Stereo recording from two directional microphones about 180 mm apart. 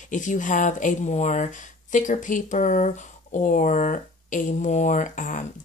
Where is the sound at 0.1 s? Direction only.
45° left (ahead or behind).